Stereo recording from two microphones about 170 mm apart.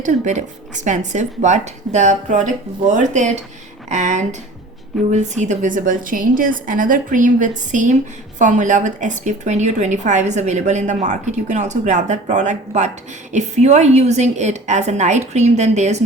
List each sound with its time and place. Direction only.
0.0 s a woman's voice: 45° right (ahead or behind)